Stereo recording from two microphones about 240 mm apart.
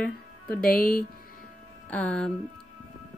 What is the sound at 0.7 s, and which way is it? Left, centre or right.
Speech, left.